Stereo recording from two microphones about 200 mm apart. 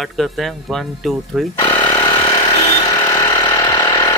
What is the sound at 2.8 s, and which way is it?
Vehicle, 15° left (ahead or behind).